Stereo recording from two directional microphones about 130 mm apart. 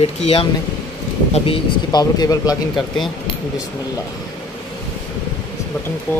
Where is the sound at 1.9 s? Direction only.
30° left (ahead or behind).